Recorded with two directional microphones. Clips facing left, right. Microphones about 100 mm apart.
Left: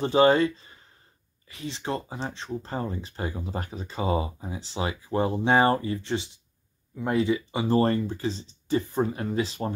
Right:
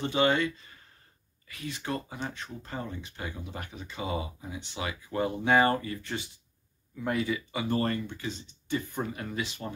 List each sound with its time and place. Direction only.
0.0 s speech: 35° left (ahead or behind)